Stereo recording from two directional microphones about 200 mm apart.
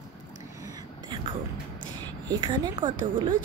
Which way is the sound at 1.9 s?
20° right (ahead or behind).